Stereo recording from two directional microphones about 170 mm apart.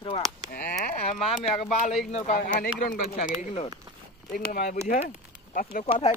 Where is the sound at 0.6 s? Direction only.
60° left (ahead or behind).